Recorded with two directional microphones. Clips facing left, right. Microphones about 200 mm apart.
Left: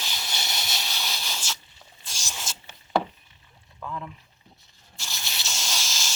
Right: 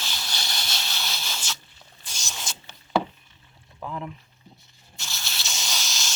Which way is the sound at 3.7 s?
20° right (ahead or behind).